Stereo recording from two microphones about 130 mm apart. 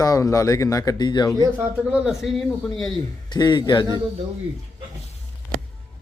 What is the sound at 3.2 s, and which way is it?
Speech, 35° left (ahead or behind).